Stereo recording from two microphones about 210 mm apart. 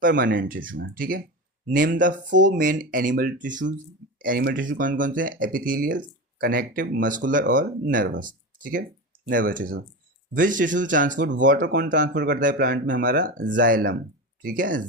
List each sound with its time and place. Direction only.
0.1 s speech: 50° right (ahead or behind)